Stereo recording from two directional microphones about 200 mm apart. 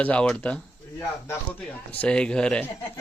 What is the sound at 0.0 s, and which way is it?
Speech, 5° left (ahead or behind).